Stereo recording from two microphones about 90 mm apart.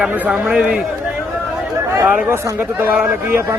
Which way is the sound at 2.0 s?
15° right (ahead or behind).